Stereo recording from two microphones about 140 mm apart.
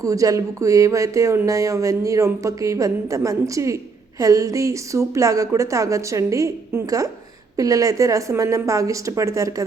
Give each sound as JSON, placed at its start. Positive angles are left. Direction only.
{"t": 0.0, "sound": "speech", "side_deg": -25}